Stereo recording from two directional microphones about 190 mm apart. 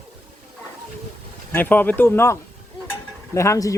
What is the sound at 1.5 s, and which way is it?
Speech, 10° left (ahead or behind).